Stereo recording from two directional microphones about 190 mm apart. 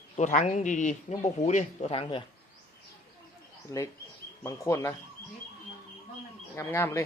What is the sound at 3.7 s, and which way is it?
Speech, 20° left (ahead or behind).